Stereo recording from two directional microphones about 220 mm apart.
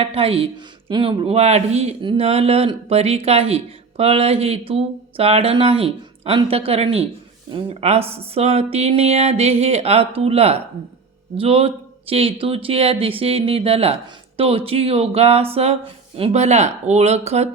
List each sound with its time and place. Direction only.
0.0 s speech: 25° right (ahead or behind)